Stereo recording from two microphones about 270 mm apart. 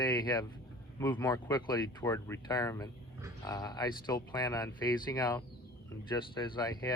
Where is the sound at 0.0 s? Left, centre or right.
Centre.